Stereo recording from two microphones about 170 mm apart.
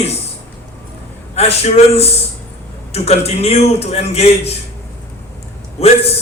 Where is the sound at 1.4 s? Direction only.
40° left (ahead or behind).